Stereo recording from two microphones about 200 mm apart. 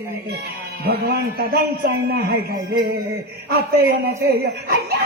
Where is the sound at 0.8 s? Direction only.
50° right (ahead or behind).